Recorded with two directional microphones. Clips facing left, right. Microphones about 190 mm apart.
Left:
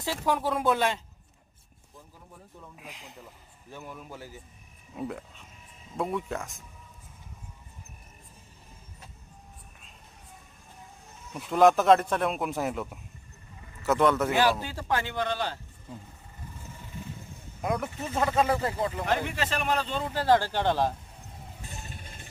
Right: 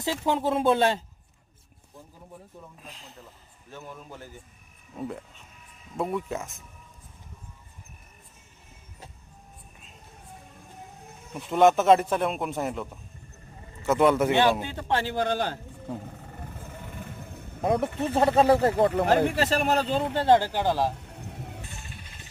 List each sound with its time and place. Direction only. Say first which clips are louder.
0.0 s speech: right 2 dB; 20° right (ahead or behind)
2.7 s a man's voice: left 1 dB; 15° left (ahead or behind); by 6.7 s 5° right (ahead or behind)
11.3 s a man's voice: right 1 dB; centre (ahead or behind)
14.3 s a sound: right 3 dB; 25° right (ahead or behind); by 17.6 s 60° right (ahead or behind)
17.6 s speech: right 5 dB; 30° right (ahead or behind)
17.8 s speech: right 6 dB; 60° right (ahead or behind)
19.0 s speech: right 7 dB; 40° right (ahead or behind)
20.1 s speech: right 2 dB; 25° right (ahead or behind)
20.5 s a man's voice: right 1 dB; 5° right (ahead or behind)
21.0 s a sound: right 7 dB; 70° right (ahead or behind)
21.8 s a sound: left 1 dB; 50° left (ahead or behind)